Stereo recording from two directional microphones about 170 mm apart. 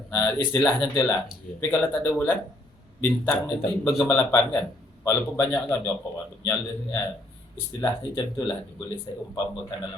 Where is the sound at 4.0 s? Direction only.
15° left (ahead or behind).